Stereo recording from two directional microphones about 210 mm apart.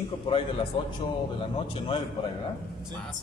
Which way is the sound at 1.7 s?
25° left (ahead or behind).